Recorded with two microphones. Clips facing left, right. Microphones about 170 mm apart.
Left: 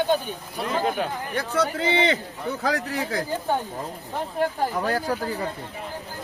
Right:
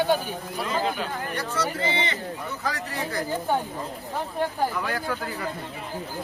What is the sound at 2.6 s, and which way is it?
Speech, 75° left (ahead or behind).